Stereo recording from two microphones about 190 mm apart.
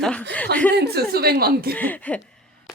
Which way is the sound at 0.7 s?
60° right (ahead or behind).